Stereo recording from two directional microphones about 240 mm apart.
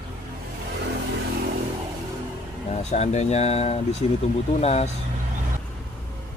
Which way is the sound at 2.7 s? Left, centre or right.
Left.